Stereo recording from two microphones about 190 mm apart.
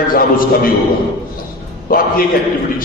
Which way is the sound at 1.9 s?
45° left (ahead or behind).